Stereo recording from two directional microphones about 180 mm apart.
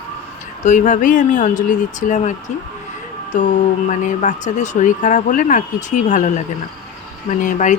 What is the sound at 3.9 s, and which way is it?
Speech, 45° left (ahead or behind).